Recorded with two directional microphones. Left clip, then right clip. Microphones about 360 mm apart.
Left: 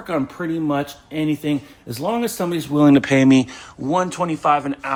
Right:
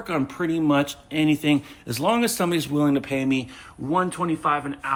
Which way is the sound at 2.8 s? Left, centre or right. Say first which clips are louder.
Left 13 dB; left.